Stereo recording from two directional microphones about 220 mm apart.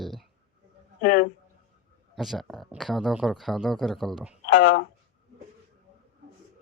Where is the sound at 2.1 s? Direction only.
Centre (ahead or behind).